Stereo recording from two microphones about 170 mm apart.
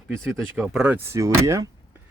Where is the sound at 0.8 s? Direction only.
15° right (ahead or behind).